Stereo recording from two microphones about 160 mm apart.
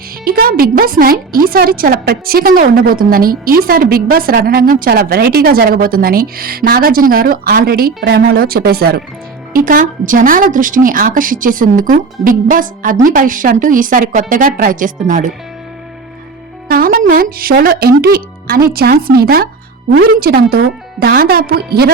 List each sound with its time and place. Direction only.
0.3 s speech: 65° right (ahead or behind)
9.5 s a woman's voice: 60° right (ahead or behind)
16.6 s a woman's voice: 65° right (ahead or behind)